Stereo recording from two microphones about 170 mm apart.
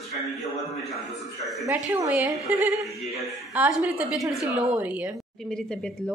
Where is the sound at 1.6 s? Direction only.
15° right (ahead or behind).